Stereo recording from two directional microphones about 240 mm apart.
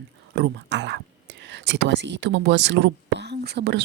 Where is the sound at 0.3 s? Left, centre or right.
Right.